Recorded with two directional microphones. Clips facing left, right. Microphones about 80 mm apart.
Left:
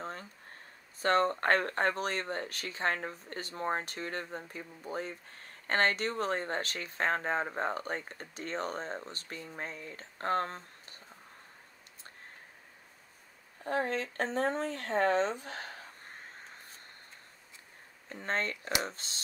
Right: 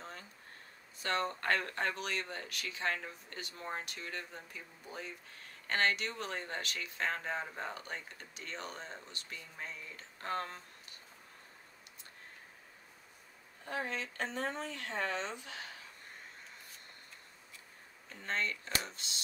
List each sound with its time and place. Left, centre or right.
0.0 s a sound: left
0.9 s speech: left
13.7 s speech: left
18.1 s speech: left